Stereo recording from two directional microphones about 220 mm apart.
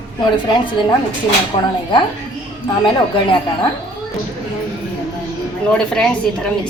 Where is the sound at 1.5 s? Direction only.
25° left (ahead or behind).